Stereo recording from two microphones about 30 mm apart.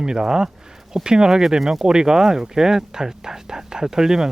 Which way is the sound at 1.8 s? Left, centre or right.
Right.